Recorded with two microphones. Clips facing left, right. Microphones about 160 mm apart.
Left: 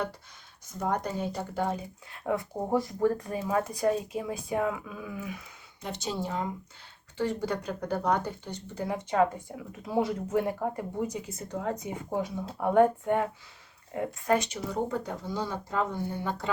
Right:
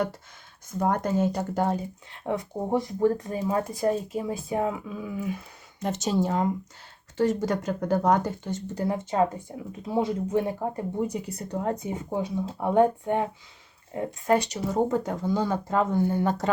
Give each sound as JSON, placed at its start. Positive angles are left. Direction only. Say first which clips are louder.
{"t": 0.8, "sound": "speech", "louder": "right 6 dB", "side_deg": -50}
{"t": 2.2, "sound": "speech", "louder": "right 1 dB", "side_deg": -20}
{"t": 5.8, "sound": "speech", "louder": "right 8 dB", "side_deg": -45}
{"t": 8.7, "sound": "speech", "louder": "right 1 dB", "side_deg": -35}
{"t": 9.8, "sound": "speech", "louder": "right 2 dB", "side_deg": -25}
{"t": 11.3, "sound": "speech", "louder": "right 4 dB", "side_deg": -40}
{"t": 11.8, "sound": "speech", "louder": "right 2 dB", "side_deg": -25}
{"t": 14.5, "sound": "speech", "louder": "right 6 dB", "side_deg": -45}